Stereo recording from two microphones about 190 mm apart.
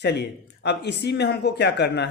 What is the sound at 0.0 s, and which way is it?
Speech, 60° left (ahead or behind).